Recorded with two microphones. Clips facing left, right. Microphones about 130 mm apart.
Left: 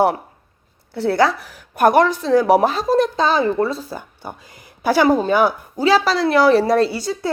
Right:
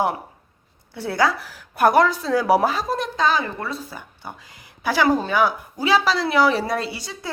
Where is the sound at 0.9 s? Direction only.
25° left (ahead or behind).